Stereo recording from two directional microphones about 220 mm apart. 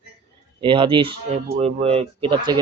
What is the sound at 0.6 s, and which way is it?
A man's voice, 25° right (ahead or behind).